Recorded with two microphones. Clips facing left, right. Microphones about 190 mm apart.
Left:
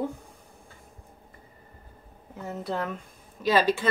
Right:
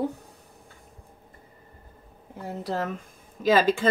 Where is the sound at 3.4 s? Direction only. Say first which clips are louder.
Right 2 dB; 50° right (ahead or behind).